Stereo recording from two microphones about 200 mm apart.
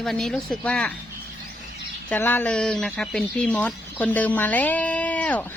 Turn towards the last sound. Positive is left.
turn(degrees=5)  # may be behind; listen again after turning